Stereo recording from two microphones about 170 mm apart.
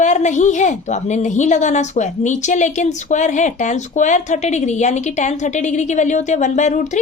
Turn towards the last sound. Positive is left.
turn(degrees=45)  # may be behind; listen again after turning